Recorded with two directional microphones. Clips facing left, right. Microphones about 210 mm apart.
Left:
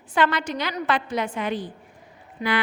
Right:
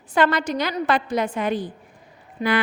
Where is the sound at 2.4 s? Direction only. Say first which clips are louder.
Right 3 dB; 30° right (ahead or behind).